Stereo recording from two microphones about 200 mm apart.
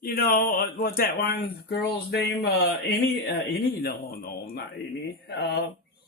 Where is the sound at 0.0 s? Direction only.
45° left (ahead or behind).